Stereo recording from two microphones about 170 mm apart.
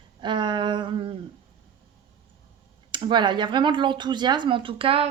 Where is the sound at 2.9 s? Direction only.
30° right (ahead or behind).